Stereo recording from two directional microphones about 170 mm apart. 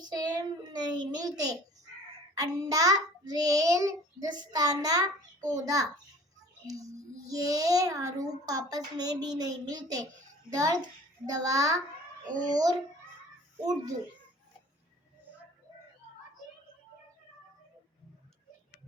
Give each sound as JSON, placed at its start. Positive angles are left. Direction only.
{"t": 0.0, "sound": "a sound", "side_deg": -20}
{"t": 2.3, "sound": "a child's voice", "side_deg": -20}
{"t": 12.2, "sound": "a child's voice", "side_deg": -50}
{"t": 12.5, "sound": "a child's voice", "side_deg": -25}